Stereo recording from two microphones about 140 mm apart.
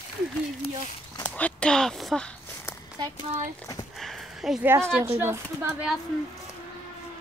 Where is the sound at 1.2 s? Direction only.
10° left (ahead or behind).